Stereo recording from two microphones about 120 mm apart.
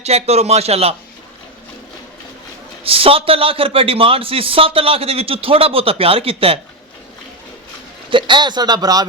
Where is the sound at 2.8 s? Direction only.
55° right (ahead or behind).